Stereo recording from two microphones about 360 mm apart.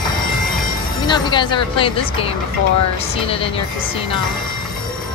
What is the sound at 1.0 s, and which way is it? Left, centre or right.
Speech, centre.